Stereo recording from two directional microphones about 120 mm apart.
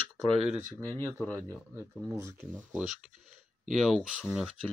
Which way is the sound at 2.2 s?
25° right (ahead or behind).